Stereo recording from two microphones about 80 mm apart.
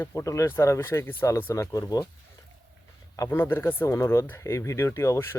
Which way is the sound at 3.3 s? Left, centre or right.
Left.